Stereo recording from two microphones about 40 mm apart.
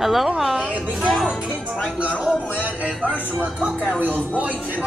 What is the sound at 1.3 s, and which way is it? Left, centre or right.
Speech, right.